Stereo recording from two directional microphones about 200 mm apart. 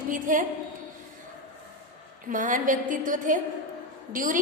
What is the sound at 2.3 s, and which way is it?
A woman's voice, 40° right (ahead or behind).